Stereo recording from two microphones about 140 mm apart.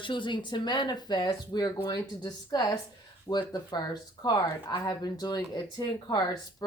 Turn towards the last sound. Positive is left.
turn(degrees=30)  # may be behind; listen again after turning